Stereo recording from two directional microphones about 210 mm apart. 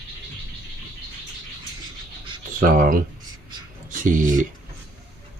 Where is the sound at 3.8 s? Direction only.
40° right (ahead or behind).